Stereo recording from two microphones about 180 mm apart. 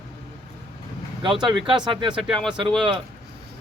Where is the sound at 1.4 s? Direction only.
25° right (ahead or behind).